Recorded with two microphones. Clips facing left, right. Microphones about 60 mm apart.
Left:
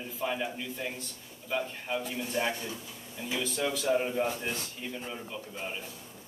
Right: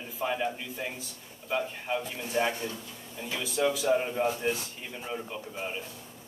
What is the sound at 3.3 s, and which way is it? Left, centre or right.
A man's voice, centre.